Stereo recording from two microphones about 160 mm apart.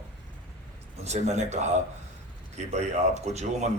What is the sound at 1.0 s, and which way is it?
A man's voice, 45° right (ahead or behind).